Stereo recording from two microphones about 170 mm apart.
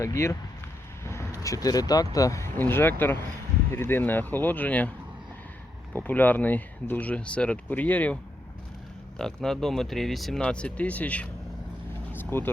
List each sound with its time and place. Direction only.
0.0 s speech: 15° left (ahead or behind)
5.9 s speech: 10° left (ahead or behind)
12.1 s vehicle: 10° left (ahead or behind)